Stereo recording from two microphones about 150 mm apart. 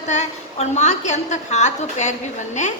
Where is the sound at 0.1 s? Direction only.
50° left (ahead or behind).